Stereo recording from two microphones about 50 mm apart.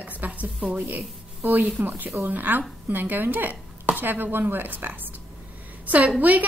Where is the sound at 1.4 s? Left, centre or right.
Right.